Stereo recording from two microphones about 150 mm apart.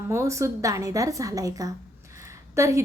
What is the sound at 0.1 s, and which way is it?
A woman's voice, 20° right (ahead or behind).